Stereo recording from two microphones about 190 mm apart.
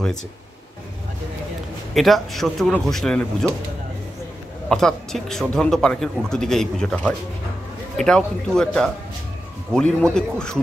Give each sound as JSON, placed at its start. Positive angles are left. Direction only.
{"t": 2.0, "sound": "a man's voice", "side_deg": 0}
{"t": 4.6, "sound": "a man's voice", "side_deg": 0}